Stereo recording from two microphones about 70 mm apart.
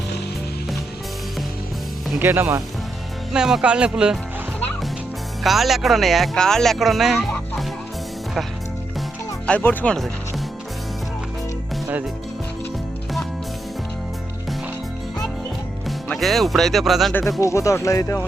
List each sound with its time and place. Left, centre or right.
2.1 s speech: right
3.3 s speech: centre
5.4 s speech: centre
9.5 s speech: left
16.1 s speech: centre
17.4 s speech: left